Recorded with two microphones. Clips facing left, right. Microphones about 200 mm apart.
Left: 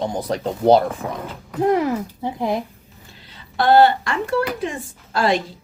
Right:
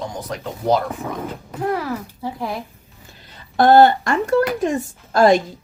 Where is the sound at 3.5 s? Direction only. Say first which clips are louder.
Right 2 dB; 45° right (ahead or behind).